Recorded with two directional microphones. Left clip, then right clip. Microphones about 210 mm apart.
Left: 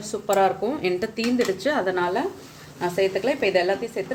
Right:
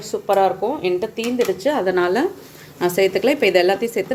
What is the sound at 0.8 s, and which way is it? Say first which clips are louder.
Speech: right 4 dB; 35° left (ahead or behind).